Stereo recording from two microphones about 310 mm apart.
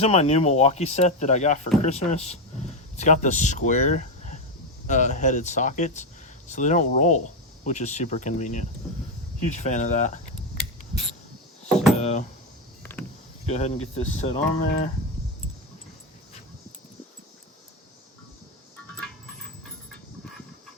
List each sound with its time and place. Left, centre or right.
0.0 s speech: centre
11.9 s speech: left
12.8 s mechanisms: centre
13.4 s speech: left